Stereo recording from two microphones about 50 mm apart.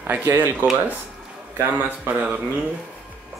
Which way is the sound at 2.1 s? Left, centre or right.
Right.